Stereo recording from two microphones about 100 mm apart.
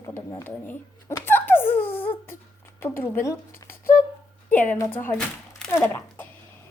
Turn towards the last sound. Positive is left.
turn(degrees=25)  # may be behind; listen again after turning